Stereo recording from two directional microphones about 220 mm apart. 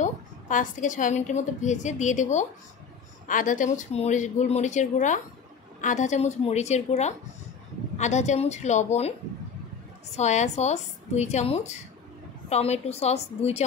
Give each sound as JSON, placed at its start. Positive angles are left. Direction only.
{"t": 0.0, "sound": "a woman's voice", "side_deg": 35}
{"t": 10.1, "sound": "a woman's voice", "side_deg": 30}